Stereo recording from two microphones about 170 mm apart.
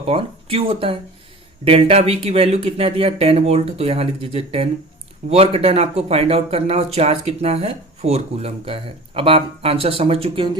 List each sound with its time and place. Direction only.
0.0 s speech: 35° right (ahead or behind)